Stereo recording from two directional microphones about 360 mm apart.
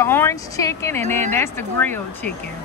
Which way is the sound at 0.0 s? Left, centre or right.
Centre.